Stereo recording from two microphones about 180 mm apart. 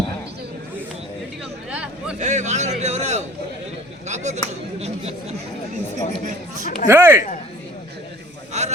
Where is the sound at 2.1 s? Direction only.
40° right (ahead or behind).